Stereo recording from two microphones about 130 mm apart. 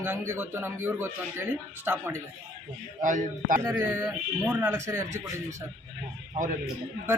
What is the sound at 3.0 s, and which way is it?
Speech, 80° right.